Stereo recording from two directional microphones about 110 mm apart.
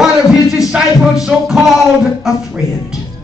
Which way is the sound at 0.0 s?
5° right (ahead or behind).